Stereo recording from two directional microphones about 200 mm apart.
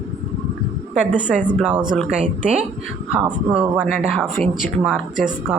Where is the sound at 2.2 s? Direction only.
35° right (ahead or behind).